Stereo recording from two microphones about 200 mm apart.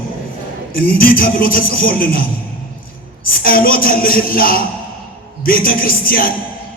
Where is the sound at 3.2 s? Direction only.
45° left (ahead or behind).